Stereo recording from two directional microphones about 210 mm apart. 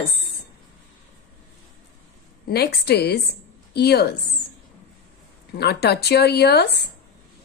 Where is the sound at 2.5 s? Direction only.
50° left (ahead or behind).